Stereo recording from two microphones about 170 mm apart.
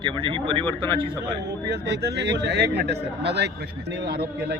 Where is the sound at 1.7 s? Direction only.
75° right (ahead or behind).